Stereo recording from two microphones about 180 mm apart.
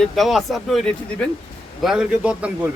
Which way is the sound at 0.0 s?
Centre (ahead or behind).